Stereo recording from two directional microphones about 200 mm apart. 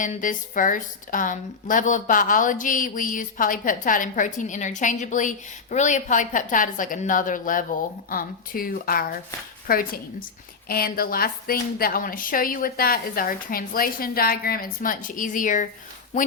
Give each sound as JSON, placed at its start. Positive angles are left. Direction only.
{"t": 0.0, "sound": "a woman's voice", "side_deg": 40}